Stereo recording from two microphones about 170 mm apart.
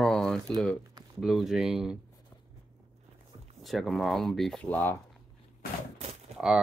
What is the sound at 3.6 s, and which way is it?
Speech, centre (ahead or behind).